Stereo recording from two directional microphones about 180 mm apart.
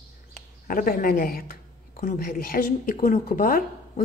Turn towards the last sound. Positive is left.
turn(degrees=50)  # may be behind; listen again after turning